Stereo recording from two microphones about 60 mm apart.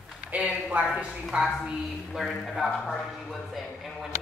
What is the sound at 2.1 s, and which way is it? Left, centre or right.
Speech, centre.